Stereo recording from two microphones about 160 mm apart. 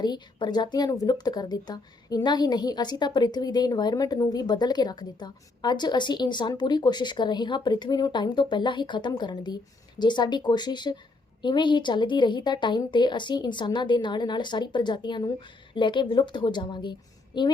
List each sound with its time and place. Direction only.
0.0 s speech: 25° left (ahead or behind)